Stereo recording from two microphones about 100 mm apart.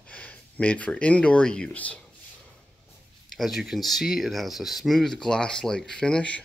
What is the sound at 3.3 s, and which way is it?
Speech, centre (ahead or behind).